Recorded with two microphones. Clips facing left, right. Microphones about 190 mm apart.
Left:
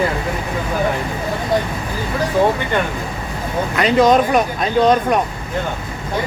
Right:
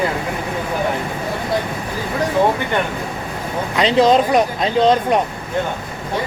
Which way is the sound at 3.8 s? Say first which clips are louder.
Even; 25° right (ahead or behind).